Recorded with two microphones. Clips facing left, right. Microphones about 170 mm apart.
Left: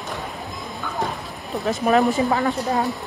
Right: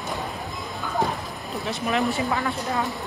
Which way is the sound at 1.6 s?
40° left (ahead or behind).